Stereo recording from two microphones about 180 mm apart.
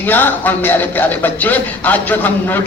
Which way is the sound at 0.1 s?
10° left (ahead or behind).